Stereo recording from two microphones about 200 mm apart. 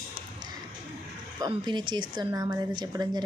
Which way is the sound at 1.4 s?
20° right (ahead or behind).